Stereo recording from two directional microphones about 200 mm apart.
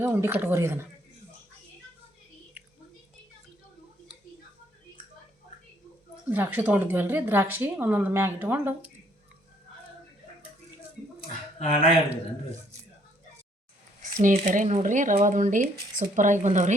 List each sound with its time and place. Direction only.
0.0 s speech: 10° right (ahead or behind)
6.3 s speech: 10° right (ahead or behind)
11.2 s a sound: 40° left (ahead or behind)
14.0 s speech: 40° right (ahead or behind)